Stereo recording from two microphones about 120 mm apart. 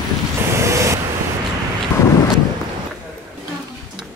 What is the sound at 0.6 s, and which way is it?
Waves, 25° right (ahead or behind).